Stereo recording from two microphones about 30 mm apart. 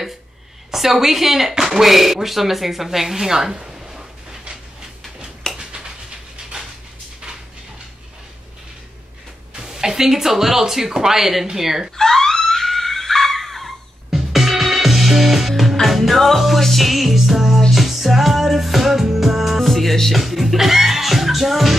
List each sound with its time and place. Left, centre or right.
0.7 s speech: centre; by 4.0 s right
5.4 s a sound: left
6.5 s a sound: right
9.7 s speech: centre
11.1 s speech: centre
12.0 s screaming: centre
14.1 s music: centre